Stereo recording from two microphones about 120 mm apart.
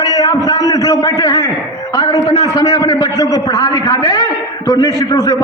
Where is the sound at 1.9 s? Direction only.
30° left (ahead or behind).